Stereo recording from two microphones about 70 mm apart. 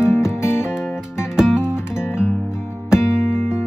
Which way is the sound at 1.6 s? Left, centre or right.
Left.